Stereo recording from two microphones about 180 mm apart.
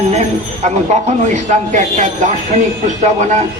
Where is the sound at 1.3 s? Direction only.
45° right (ahead or behind).